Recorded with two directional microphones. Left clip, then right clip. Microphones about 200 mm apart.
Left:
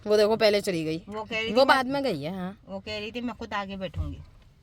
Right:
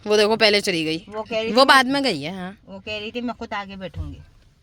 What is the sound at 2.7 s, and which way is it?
Speech, 20° right (ahead or behind).